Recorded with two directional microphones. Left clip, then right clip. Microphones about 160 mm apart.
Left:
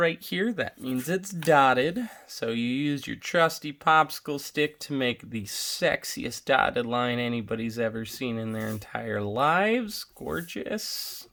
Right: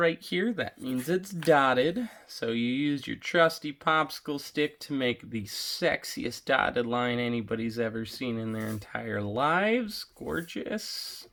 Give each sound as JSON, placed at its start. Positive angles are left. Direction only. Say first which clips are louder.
{"t": 0.0, "sound": "speech", "louder": "left 1 dB", "side_deg": 25}